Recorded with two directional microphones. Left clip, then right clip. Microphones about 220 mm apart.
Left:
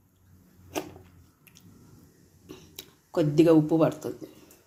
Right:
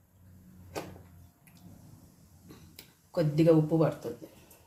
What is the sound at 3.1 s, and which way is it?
Speech, 35° left (ahead or behind).